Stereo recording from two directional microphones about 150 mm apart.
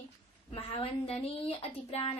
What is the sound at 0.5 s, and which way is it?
Speech, 40° left (ahead or behind).